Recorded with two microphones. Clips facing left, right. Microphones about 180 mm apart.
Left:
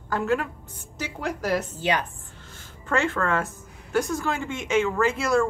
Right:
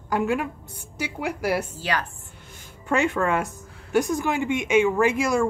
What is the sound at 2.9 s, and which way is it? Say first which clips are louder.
A woman's voice: right 2 dB; 15° right (ahead or behind).